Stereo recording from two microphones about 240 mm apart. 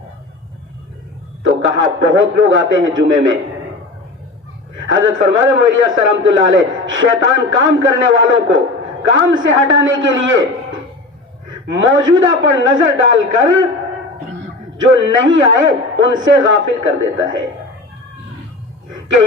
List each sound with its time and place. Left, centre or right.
1.5 s a man's voice: right
4.9 s a man's voice: right
14.9 s a man's voice: right